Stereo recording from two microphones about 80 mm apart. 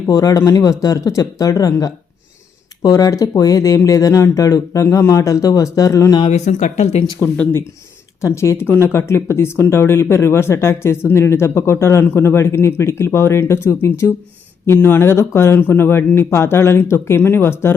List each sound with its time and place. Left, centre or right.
0.1 s speech: left
7.2 s speech: left